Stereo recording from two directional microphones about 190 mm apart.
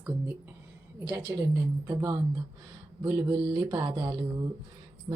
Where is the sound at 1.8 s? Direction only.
20° right (ahead or behind).